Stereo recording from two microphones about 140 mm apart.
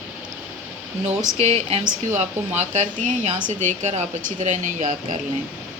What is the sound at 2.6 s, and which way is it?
Speech, 55° right (ahead or behind).